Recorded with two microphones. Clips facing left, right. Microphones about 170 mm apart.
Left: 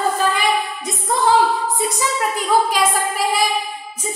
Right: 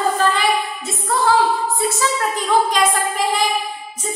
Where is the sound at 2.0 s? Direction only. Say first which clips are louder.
Right 1 dB; 10° left (ahead or behind).